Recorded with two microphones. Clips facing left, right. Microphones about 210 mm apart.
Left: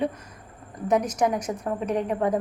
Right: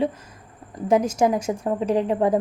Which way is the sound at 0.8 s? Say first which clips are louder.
Right 4 dB; 25° right (ahead or behind).